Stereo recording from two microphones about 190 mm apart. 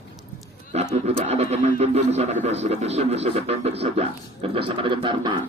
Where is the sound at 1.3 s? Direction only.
35° right (ahead or behind).